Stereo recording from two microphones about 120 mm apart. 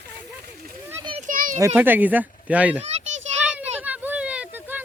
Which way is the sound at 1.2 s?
90° right.